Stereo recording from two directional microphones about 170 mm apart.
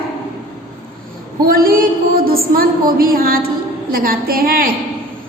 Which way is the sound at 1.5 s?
60° right (ahead or behind).